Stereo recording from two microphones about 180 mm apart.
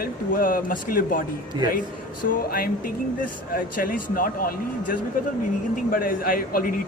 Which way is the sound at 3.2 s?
50° left (ahead or behind).